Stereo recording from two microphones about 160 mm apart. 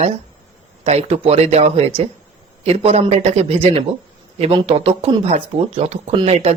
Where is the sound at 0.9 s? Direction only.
40° right (ahead or behind).